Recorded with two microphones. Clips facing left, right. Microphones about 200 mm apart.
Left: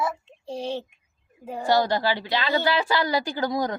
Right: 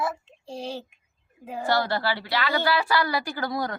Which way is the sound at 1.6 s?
15° left (ahead or behind).